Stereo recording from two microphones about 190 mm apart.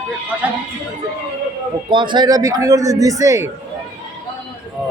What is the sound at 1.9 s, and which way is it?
A man's voice, 25° right (ahead or behind).